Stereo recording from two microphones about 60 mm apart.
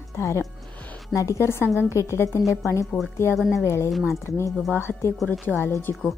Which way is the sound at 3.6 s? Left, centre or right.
Left.